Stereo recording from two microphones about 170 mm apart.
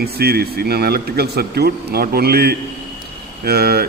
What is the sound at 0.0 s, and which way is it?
Speech, 65° right (ahead or behind).